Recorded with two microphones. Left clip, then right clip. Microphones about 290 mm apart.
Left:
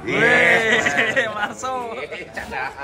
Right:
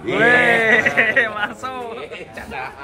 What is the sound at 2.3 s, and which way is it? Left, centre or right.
Speech, left.